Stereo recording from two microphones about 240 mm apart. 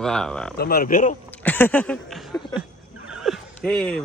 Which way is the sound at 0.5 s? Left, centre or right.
Left.